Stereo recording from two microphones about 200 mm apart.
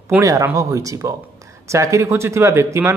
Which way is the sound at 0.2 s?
15° right (ahead or behind).